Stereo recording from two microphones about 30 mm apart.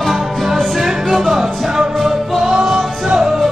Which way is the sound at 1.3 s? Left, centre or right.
Centre.